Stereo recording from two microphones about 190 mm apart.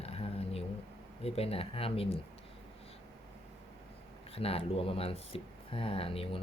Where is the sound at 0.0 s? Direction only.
30° left (ahead or behind).